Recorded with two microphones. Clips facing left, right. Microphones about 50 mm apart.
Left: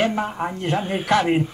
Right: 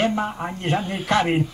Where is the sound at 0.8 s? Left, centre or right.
Left.